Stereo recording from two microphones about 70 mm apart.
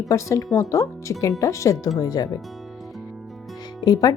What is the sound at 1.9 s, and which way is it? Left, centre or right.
Speech, left.